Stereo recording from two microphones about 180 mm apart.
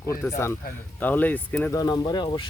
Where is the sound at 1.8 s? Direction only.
20° left (ahead or behind).